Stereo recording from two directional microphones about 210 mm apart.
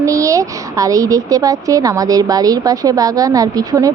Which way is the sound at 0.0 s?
15° right (ahead or behind).